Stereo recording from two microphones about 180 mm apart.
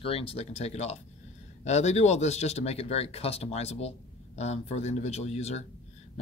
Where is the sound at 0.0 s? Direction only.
30° left (ahead or behind).